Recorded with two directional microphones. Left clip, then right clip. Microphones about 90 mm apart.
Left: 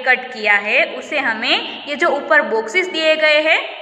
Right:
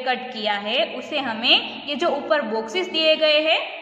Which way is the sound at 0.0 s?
20° right (ahead or behind).